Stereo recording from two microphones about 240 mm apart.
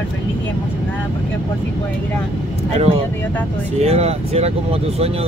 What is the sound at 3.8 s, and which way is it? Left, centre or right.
Speech, right.